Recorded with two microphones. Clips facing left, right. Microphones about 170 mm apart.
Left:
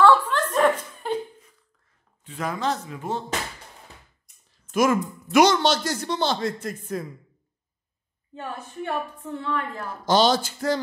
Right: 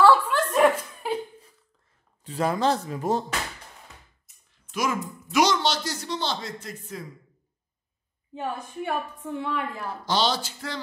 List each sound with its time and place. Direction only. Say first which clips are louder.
0.0 s chuckle: left 1 dB; 10° right (ahead or behind)
2.2 s a man's voice: right 3 dB; 35° right (ahead or behind)
4.5 s speech: left 7 dB; 50° left (ahead or behind)
8.4 s a woman's voice: right 2 dB; 10° right (ahead or behind)
10.0 s speech: left 6 dB; 45° left (ahead or behind)